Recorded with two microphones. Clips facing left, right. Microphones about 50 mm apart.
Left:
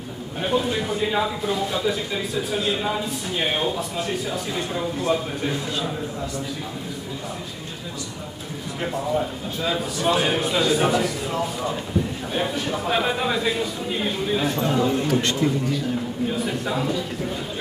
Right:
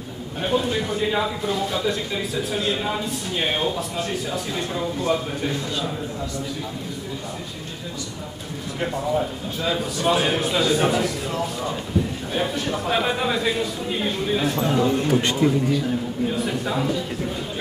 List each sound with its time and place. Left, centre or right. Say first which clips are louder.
0.4 s speech: even; centre
8.7 s speech: right 1 dB; centre
15.0 s a man's voice: right 2 dB; centre
16.3 s speech: right 1 dB; centre